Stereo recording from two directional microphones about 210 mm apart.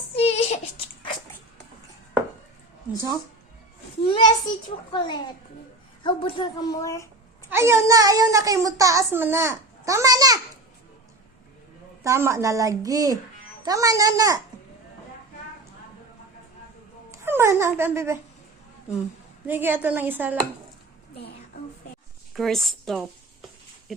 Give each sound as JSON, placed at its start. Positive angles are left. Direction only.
{"t": 0.2, "sound": "a sound", "side_deg": 30}
{"t": 4.1, "sound": "a woman's voice", "side_deg": 20}
{"t": 7.5, "sound": "a child's voice", "side_deg": -15}
{"t": 12.0, "sound": "a child's voice", "side_deg": -15}
{"t": 17.1, "sound": "speech", "side_deg": -10}
{"t": 19.5, "sound": "a child's voice", "side_deg": -10}
{"t": 22.4, "sound": "a woman's voice", "side_deg": 0}